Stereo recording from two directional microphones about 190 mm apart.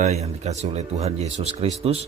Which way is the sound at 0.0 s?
35° right (ahead or behind).